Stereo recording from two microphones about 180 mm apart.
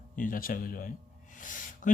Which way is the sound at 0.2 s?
50° left (ahead or behind).